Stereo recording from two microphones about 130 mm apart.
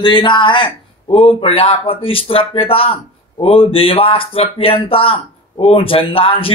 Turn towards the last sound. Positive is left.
turn(degrees=45)  # may be behind; listen again after turning